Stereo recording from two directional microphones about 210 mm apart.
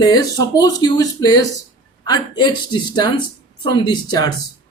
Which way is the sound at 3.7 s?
20° left (ahead or behind).